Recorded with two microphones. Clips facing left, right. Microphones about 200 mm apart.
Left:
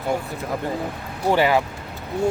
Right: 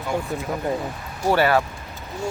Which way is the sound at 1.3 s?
15° left (ahead or behind).